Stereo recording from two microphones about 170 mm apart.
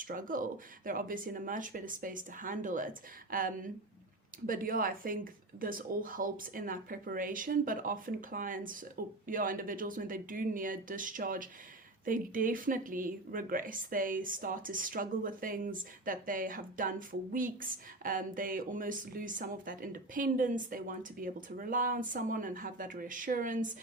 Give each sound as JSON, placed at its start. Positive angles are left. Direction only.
{"t": 0.0, "sound": "speech", "side_deg": -55}